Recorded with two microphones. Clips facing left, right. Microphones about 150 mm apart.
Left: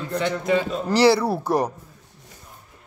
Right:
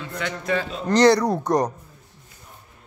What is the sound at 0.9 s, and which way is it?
Speech, 5° left (ahead or behind).